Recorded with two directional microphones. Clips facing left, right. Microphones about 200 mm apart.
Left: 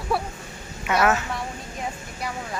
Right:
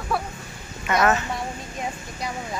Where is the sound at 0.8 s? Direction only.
5° left (ahead or behind).